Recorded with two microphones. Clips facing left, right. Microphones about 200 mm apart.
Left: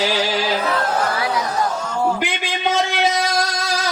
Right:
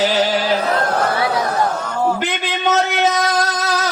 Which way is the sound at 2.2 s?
10° left (ahead or behind).